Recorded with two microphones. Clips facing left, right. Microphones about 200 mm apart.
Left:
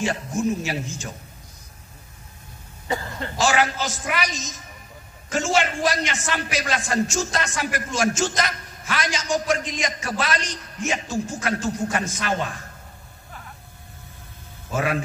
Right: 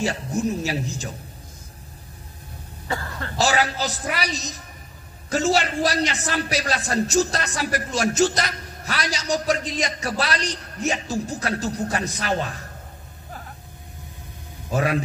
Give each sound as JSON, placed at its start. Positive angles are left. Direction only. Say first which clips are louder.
{"t": 0.3, "sound": "a man's voice", "louder": "even", "side_deg": -40}
{"t": 2.9, "sound": "speech", "louder": "left 2 dB", "side_deg": 20}
{"t": 3.3, "sound": "a man's voice", "louder": "even", "side_deg": -40}
{"t": 14.7, "sound": "a man's voice", "louder": "right 2 dB", "side_deg": -40}